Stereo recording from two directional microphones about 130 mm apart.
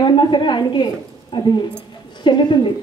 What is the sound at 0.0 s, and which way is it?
A woman's voice, 35° left (ahead or behind).